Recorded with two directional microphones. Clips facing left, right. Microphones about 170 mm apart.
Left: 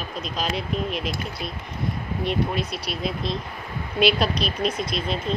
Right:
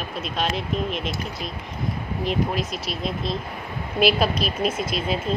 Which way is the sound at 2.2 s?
Centre (ahead or behind).